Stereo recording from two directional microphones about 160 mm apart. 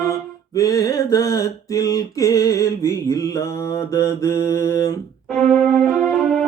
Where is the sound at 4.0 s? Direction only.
20° left (ahead or behind).